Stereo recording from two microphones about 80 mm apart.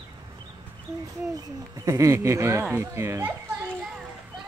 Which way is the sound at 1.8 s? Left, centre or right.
Right.